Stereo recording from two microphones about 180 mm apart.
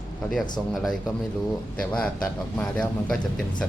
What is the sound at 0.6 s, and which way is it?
Speech, 5° left (ahead or behind).